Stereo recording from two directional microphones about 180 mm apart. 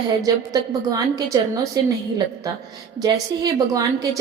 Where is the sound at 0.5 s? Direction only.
20° right (ahead or behind).